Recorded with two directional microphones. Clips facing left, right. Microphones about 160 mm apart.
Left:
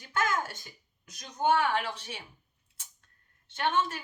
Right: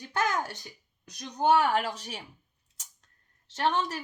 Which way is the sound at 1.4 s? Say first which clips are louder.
Right 3 dB; 40° right (ahead or behind).